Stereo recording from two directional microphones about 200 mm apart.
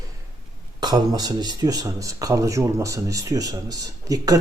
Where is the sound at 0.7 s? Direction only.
20° right (ahead or behind).